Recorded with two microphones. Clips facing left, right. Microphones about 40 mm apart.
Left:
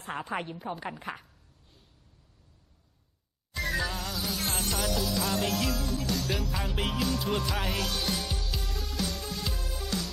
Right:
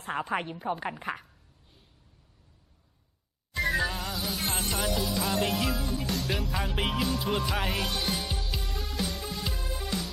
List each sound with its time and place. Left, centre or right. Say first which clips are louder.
0.0 s a woman's voice: right 3 dB; centre
3.5 s music: right 3 dB; centre